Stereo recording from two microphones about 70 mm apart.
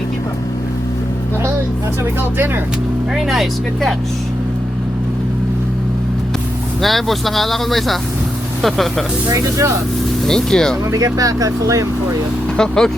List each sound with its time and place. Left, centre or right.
6.8 s speech: centre
9.3 s speech: right
10.2 s speech: centre
10.9 s speech: right
12.5 s speech: centre